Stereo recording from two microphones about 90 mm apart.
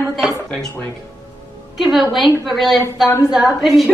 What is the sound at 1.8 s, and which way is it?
A woman's voice, centre (ahead or behind).